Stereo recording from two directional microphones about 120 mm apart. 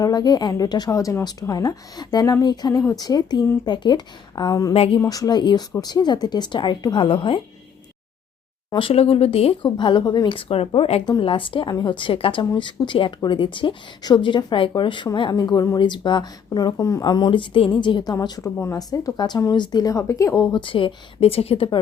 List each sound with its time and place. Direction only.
0.0 s speech: 35° left (ahead or behind)
4.7 s speech: 55° left (ahead or behind)
4.9 s speech: 30° left (ahead or behind); by 7.4 s 45° left (ahead or behind)
8.7 s speech: 50° left (ahead or behind)
11.0 s speech: 40° left (ahead or behind)